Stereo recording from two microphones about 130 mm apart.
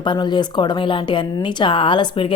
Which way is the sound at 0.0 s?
35° left (ahead or behind).